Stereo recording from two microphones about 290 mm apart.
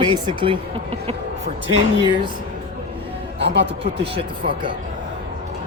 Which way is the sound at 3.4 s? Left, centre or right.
Right.